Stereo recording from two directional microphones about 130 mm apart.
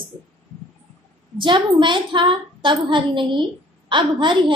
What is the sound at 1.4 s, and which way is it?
A woman's voice, 40° right (ahead or behind).